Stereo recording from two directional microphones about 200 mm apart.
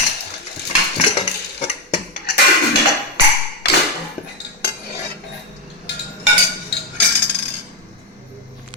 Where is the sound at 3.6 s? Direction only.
55° left (ahead or behind).